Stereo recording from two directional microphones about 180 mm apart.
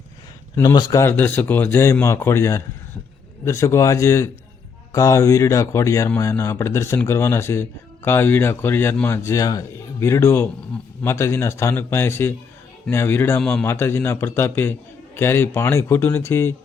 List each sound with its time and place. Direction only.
0.5 s speech: 20° left (ahead or behind)